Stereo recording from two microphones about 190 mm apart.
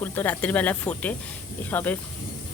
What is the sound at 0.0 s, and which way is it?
Speech, 10° left (ahead or behind).